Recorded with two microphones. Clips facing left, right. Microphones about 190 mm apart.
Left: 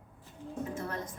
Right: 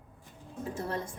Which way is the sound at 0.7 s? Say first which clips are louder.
Right 3 dB; 30° right (ahead or behind).